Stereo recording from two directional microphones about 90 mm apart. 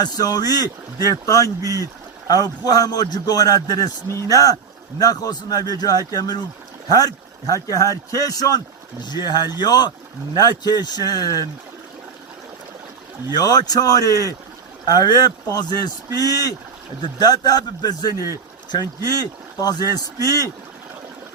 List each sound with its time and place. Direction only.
0.0 s a man's voice: 45° left (ahead or behind)
13.3 s a man's voice: 45° left (ahead or behind)